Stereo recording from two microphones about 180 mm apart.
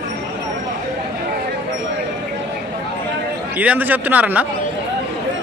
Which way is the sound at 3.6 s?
10° right (ahead or behind).